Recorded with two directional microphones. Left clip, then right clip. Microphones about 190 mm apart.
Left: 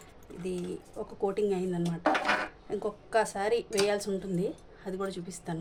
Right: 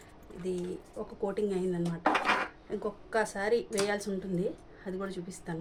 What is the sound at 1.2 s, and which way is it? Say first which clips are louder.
A woman's voice: left 2 dB; 45° left (ahead or behind).